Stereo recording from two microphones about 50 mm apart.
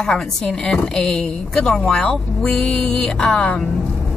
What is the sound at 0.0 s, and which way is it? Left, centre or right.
Speech, centre.